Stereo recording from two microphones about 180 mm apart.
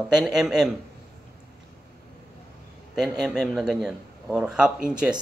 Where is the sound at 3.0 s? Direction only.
5° right (ahead or behind).